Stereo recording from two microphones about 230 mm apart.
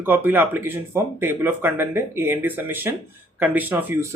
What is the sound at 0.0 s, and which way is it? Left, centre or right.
A man's voice, centre.